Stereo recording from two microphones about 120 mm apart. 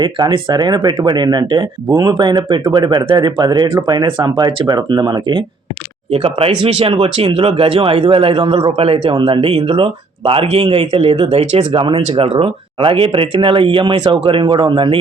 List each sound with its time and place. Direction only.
0.0 s speech: 45° right (ahead or behind)
6.1 s speech: 55° right (ahead or behind)